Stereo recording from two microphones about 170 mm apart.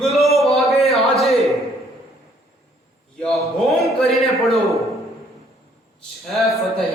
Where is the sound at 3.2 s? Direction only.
Centre (ahead or behind).